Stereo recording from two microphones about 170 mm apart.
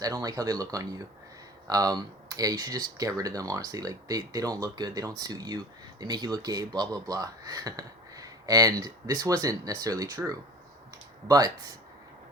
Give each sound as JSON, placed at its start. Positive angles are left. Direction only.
{"t": 0.0, "sound": "speech", "side_deg": -20}